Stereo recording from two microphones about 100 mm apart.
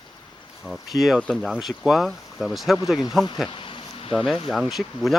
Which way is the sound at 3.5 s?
60° left (ahead or behind).